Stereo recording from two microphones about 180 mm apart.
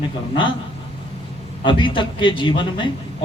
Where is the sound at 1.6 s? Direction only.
25° left (ahead or behind).